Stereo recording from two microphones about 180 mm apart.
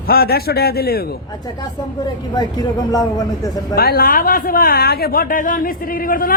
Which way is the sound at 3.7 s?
60° left (ahead or behind).